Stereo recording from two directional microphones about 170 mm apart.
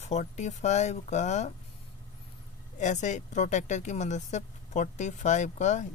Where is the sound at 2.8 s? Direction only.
45° left (ahead or behind).